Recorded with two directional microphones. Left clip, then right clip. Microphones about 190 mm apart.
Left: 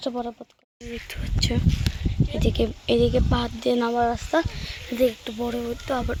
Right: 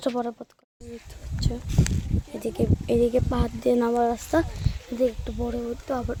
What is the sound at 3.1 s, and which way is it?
Speech, 20° right (ahead or behind).